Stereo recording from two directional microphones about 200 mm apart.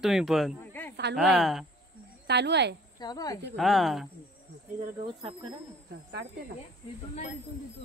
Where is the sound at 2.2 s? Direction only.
55° right (ahead or behind).